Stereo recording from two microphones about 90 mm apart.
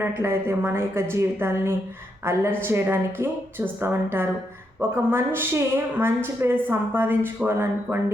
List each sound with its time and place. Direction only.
0.0 s a woman's voice: 30° right (ahead or behind)